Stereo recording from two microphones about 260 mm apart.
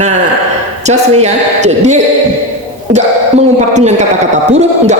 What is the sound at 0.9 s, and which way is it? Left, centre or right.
A man's voice, right.